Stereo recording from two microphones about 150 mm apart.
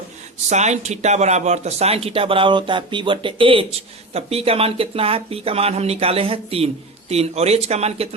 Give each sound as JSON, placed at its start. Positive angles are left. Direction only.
{"t": 0.5, "sound": "speech", "side_deg": -50}